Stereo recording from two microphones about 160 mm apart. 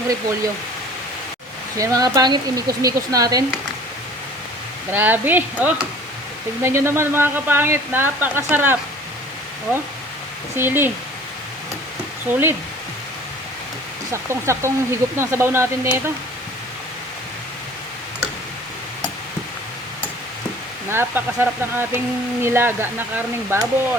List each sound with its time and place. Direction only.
1.8 s speech: 20° right (ahead or behind)
4.9 s speech: 10° right (ahead or behind)
10.6 s speech: 10° right (ahead or behind)
12.3 s speech: 15° right (ahead or behind)
14.1 s speech: 15° right (ahead or behind)
20.9 s speech: 15° right (ahead or behind)